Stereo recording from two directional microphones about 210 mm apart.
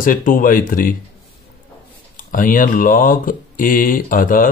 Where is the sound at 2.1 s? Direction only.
40° left (ahead or behind).